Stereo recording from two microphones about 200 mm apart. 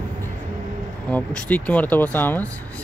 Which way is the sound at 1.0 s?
5° left (ahead or behind).